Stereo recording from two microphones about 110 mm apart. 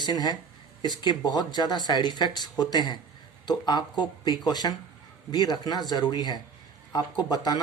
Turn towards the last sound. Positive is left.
turn(degrees=40)  # may be behind; listen again after turning